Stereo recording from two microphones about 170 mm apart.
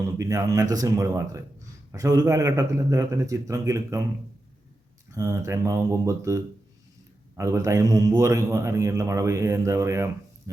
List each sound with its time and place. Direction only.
0.2 s a man's voice: 20° right (ahead or behind)
5.1 s a man's voice: 20° right (ahead or behind)